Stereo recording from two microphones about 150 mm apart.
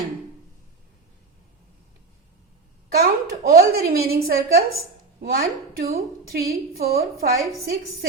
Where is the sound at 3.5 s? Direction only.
90° right.